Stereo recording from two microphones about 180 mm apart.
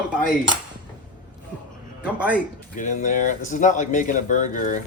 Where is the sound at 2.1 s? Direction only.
5° right (ahead or behind).